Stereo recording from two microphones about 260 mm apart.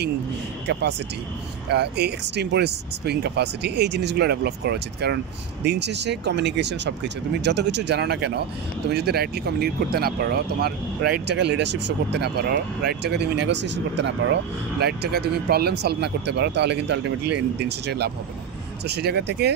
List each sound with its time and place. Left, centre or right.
0.7 s speech: right